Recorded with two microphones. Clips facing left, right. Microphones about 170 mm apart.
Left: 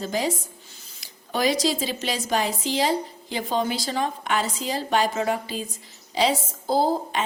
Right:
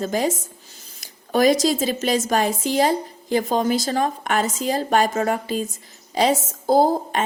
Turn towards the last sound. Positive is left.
turn(degrees=-45)  # may be behind; listen again after turning